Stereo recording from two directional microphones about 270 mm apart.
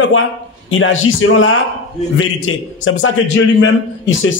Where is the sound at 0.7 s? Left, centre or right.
Left.